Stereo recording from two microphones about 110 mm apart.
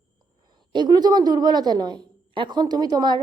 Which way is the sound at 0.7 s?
40° right (ahead or behind).